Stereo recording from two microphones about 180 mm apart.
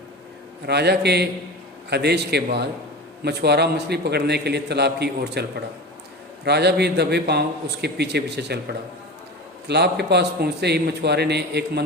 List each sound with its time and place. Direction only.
0.7 s a man's voice: 65° right (ahead or behind)